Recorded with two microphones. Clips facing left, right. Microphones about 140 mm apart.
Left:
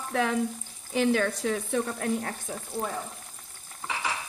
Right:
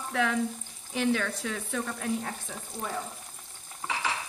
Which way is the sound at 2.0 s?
50° left (ahead or behind).